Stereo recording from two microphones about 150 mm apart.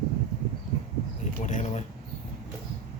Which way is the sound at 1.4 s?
50° left (ahead or behind).